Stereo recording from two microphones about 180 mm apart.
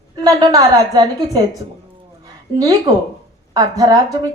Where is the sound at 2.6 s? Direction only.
20° right (ahead or behind).